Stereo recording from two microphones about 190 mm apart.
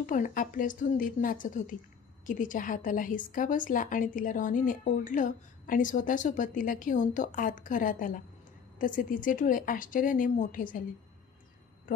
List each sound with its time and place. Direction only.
0.0 s a woman's voice: 45° left (ahead or behind)